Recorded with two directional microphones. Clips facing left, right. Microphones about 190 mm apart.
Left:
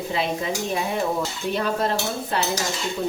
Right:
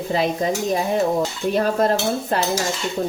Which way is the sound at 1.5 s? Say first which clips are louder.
Right 5 dB; 45° right (ahead or behind).